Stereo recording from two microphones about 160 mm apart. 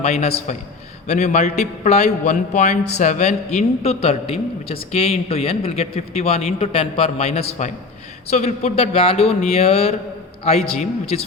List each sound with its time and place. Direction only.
0.0 s a man's voice: 40° left (ahead or behind)